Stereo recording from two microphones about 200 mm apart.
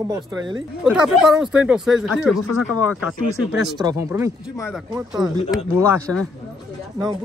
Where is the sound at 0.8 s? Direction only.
Centre (ahead or behind).